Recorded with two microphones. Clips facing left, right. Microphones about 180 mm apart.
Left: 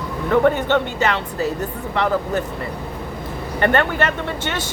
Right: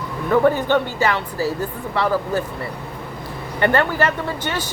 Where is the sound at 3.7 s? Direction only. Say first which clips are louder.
Right 1 dB; 25° left (ahead or behind).